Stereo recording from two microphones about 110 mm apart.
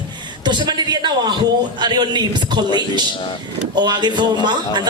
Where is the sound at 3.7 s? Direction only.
40° right (ahead or behind).